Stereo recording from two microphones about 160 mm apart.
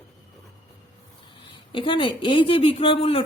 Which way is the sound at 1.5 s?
30° left (ahead or behind).